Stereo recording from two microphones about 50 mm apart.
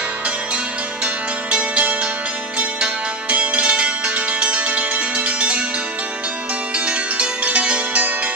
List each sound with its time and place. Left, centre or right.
1.0 s music: right
3.3 s music: right
6.9 s music: right